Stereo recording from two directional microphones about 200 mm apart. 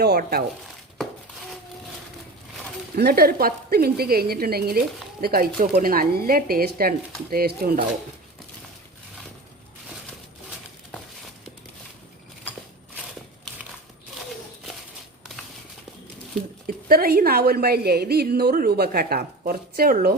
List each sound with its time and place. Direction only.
0.0 s a woman's voice: 50° right (ahead or behind)
2.9 s a woman's voice: 50° right (ahead or behind)
16.6 s a woman's voice: 45° right (ahead or behind)